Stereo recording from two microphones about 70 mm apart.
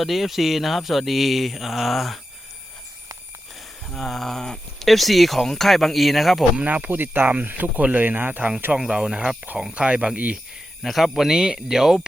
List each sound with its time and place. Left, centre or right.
0.0 s speech: centre
3.9 s speech: centre
6.6 s speech: right
8.8 s speech: centre
10.8 s speech: centre